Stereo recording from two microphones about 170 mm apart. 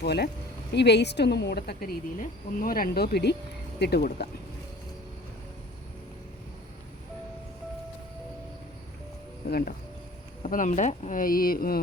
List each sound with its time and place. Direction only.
0.0 s a woman's voice: 75° left (ahead or behind)
9.5 s speech: 60° left (ahead or behind)
10.4 s speech: 50° left (ahead or behind)